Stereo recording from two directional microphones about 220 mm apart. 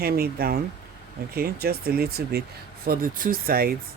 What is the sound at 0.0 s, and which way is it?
Speech, 45° right (ahead or behind).